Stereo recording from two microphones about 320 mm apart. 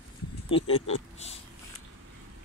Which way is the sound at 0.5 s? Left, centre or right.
Centre.